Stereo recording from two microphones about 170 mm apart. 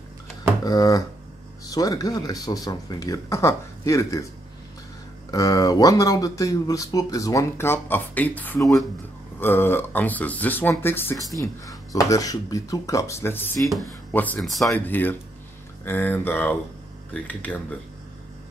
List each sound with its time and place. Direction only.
0.7 s speech: 20° left (ahead or behind)
5.3 s speech: 20° left (ahead or behind)
13.6 s speech: centre (ahead or behind)
14.7 s speech: 10° left (ahead or behind)